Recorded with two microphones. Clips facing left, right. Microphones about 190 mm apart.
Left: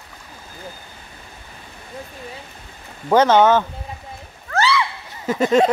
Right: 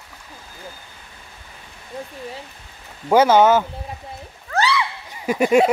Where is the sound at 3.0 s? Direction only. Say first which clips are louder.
Even; 10° right (ahead or behind).